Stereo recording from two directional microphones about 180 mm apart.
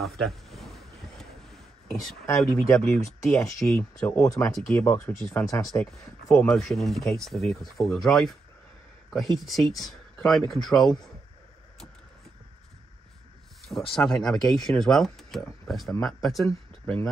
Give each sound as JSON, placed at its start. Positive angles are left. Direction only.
{"t": 0.0, "sound": "a sound", "side_deg": 0}
{"t": 2.2, "sound": "speech", "side_deg": 15}
{"t": 3.3, "sound": "speech", "side_deg": 0}
{"t": 5.8, "sound": "speech", "side_deg": 0}
{"t": 13.9, "sound": "speech", "side_deg": 0}
{"t": 16.4, "sound": "speech", "side_deg": 15}